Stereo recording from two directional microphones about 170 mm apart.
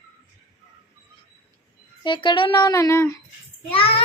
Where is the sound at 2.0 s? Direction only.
30° left (ahead or behind).